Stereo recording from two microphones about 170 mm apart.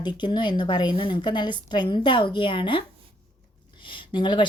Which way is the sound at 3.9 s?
30° left (ahead or behind).